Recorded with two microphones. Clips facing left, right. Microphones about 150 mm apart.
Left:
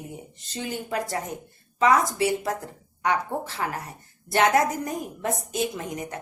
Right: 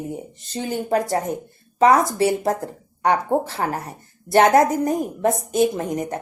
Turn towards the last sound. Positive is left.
turn(degrees=-40)  # may be behind; listen again after turning